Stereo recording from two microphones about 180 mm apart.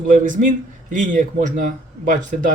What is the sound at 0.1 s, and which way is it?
Speech, 45° right (ahead or behind).